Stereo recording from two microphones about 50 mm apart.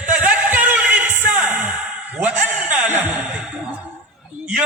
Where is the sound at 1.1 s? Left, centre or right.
Right.